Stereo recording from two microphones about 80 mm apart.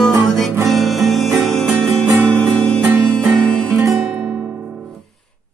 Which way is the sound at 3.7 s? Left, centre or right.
Right.